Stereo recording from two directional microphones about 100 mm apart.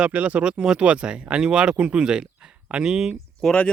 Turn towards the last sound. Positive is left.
turn(degrees=-5)  # may be behind; listen again after turning